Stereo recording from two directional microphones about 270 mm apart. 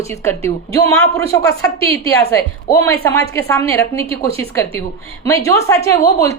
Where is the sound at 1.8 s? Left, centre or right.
Right.